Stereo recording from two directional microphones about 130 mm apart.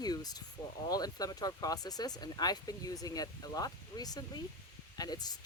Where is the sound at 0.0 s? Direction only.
30° left (ahead or behind).